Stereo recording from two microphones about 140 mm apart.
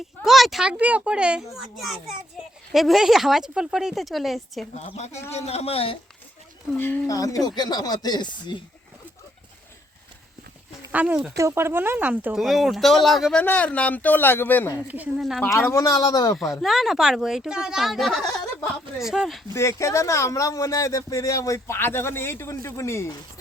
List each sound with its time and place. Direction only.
0.2 s speech: centre (ahead or behind)
4.7 s a man's voice: 50° left (ahead or behind)
6.7 s speech: 15° left (ahead or behind); by 8.6 s 35° left (ahead or behind)
10.9 s speech: 10° right (ahead or behind)
11.3 s speech: 20° right (ahead or behind)
12.4 s a man's voice: centre (ahead or behind); by 14.8 s 15° left (ahead or behind)
14.8 s speech: 10° right (ahead or behind)
15.2 s speech: centre (ahead or behind)
15.4 s speech: 20° left (ahead or behind)
16.6 s speech: centre (ahead or behind)
19.5 s speech: 20° left (ahead or behind)